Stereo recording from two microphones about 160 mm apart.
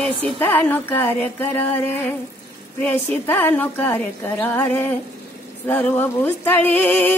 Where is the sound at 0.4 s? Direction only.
10° left (ahead or behind).